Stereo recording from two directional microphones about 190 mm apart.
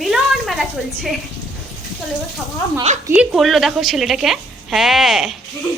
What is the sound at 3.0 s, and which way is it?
Speech, 10° right (ahead or behind).